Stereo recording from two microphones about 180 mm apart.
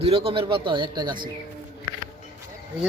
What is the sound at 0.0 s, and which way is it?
Speech, 30° right (ahead or behind).